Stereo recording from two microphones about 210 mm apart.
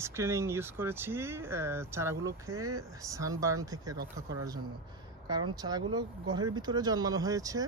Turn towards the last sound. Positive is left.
turn(degrees=-15)  # may be behind; listen again after turning